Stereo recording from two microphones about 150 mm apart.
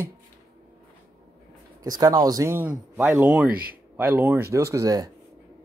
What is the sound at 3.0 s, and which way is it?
Speech, 10° right (ahead or behind).